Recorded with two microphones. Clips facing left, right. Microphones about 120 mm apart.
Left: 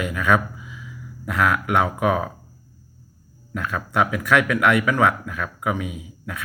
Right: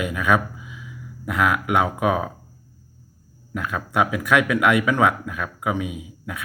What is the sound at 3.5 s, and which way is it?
Speech, 15° right (ahead or behind).